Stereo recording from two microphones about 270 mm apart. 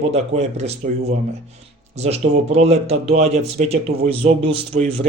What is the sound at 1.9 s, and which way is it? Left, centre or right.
A man's voice, right.